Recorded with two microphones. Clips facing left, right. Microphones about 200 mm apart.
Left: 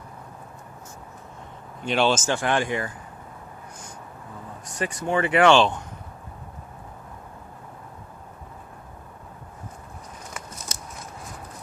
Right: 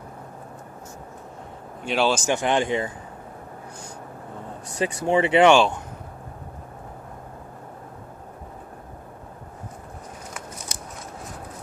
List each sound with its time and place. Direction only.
1.8 s speech: 5° right (ahead or behind)
2.2 s speech: 20° right (ahead or behind)
4.8 s speech: 30° right (ahead or behind)
5.5 s speech: 10° right (ahead or behind)